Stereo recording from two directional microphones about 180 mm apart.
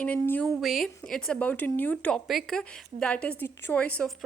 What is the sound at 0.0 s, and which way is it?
A woman's voice, 10° left (ahead or behind).